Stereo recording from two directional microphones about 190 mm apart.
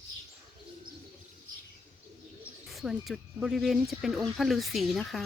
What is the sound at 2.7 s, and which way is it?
Speech, centre (ahead or behind).